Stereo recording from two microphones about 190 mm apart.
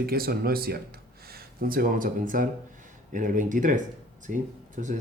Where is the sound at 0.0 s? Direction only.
50° right (ahead or behind).